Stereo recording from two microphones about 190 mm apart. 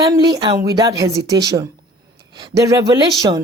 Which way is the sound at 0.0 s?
20° right (ahead or behind).